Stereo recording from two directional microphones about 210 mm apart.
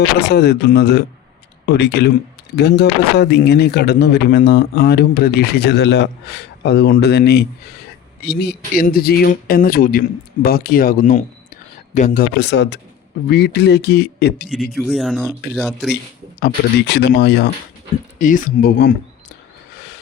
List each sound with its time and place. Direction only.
0.2 s speech: 50° left (ahead or behind)
14.8 s speech: centre (ahead or behind)
16.4 s speech: 50° left (ahead or behind)
18.2 s speech: 40° left (ahead or behind)